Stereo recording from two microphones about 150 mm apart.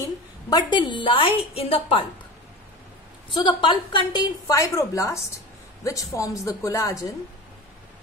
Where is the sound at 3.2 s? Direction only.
35° left (ahead or behind).